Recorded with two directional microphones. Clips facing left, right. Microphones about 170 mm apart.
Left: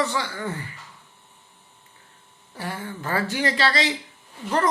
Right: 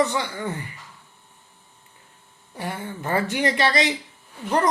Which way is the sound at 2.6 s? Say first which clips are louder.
Right 1 dB; 20° right (ahead or behind).